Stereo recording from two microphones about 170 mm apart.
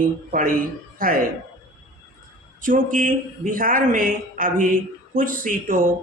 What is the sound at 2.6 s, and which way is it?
Speech, 50° right (ahead or behind).